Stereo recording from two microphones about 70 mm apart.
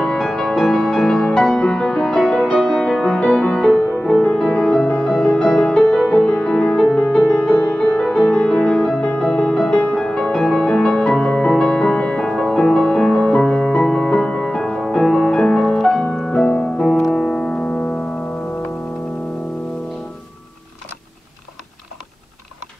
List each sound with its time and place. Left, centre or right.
0.0 s music: centre